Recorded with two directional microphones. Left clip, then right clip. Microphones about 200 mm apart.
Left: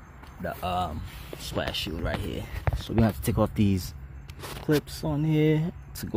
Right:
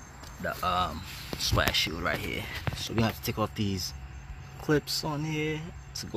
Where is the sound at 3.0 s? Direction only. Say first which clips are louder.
Left 5 dB; 45° left (ahead or behind).